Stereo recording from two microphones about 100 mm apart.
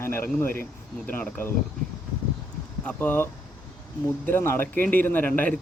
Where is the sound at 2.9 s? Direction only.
20° left (ahead or behind).